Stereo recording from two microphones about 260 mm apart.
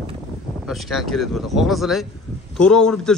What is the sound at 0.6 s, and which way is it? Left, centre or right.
Speech, centre.